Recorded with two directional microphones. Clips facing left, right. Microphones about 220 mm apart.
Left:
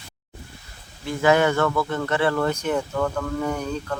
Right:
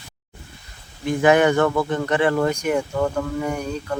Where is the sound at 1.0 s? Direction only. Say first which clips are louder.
Right 3 dB; 20° right (ahead or behind).